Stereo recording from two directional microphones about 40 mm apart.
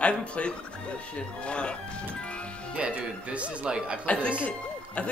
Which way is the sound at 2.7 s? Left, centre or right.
Right.